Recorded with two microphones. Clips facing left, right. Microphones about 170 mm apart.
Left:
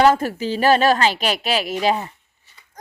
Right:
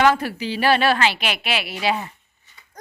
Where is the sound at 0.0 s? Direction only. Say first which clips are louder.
Left 3 dB; 45° left (ahead or behind).